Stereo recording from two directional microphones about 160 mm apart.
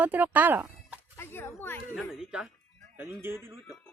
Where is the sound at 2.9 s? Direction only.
15° right (ahead or behind).